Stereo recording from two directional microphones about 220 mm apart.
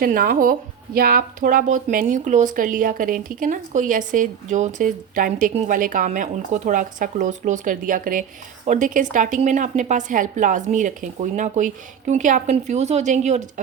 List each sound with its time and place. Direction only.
0.0 s speech: 40° right (ahead or behind)